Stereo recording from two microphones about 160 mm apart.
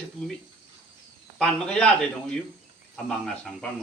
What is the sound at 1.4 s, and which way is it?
Speech, 5° left (ahead or behind).